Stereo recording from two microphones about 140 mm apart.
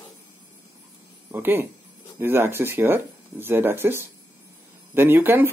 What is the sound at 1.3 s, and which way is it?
Speech, 15° right (ahead or behind).